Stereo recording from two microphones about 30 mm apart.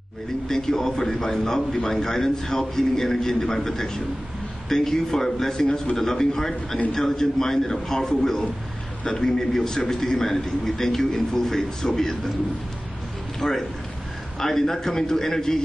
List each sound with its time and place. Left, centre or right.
0.5 s a man's voice: centre
9.5 s a man's voice: centre
13.4 s a man's voice: centre